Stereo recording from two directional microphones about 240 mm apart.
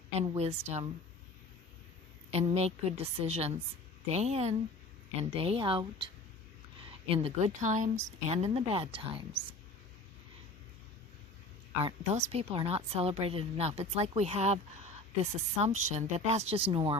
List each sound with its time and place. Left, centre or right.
0.2 s a woman's voice: right
2.6 s a woman's voice: right
11.8 s a woman's voice: right